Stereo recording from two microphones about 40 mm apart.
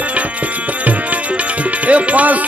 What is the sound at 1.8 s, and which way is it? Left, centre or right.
Music, right.